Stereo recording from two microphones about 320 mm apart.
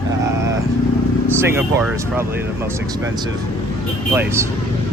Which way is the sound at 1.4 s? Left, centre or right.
Centre.